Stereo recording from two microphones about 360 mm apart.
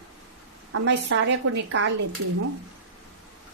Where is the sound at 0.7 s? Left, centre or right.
Right.